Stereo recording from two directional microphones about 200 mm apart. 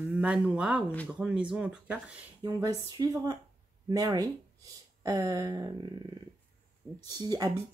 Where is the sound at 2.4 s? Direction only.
15° right (ahead or behind).